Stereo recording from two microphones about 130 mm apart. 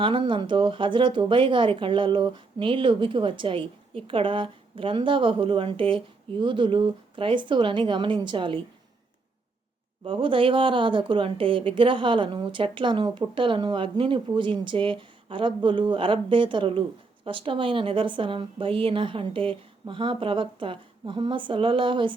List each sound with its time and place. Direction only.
0.0 s speech: 40° right (ahead or behind)
10.0 s speech: 40° right (ahead or behind)